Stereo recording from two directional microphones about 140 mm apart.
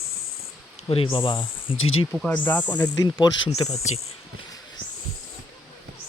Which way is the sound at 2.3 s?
10° left (ahead or behind).